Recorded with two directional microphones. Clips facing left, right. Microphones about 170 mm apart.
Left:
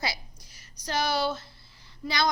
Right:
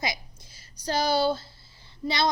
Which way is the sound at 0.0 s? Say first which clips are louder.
Right 2 dB; 20° right (ahead or behind).